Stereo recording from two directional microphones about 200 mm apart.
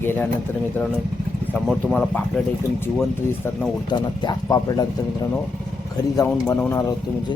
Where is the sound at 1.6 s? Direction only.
5° left (ahead or behind).